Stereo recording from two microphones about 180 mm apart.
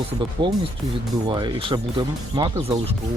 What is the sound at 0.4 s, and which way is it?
Speech, 25° right (ahead or behind).